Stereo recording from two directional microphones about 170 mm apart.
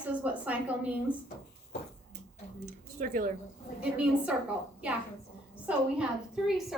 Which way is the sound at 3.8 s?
5° right (ahead or behind).